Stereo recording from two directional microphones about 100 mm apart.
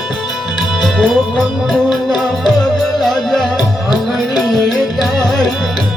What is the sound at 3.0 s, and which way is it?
Music, 5° left (ahead or behind).